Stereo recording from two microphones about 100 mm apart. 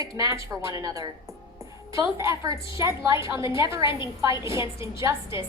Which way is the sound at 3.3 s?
55° left (ahead or behind).